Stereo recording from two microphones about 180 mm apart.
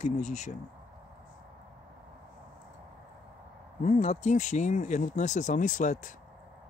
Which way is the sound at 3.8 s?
40° left (ahead or behind).